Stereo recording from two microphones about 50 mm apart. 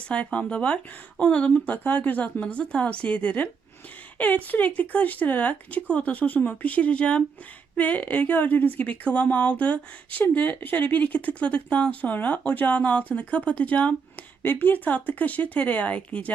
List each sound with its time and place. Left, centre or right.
0.0 s a woman's voice: left